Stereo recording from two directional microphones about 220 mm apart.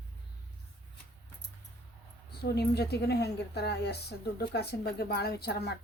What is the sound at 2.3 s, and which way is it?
Speech, 45° left (ahead or behind).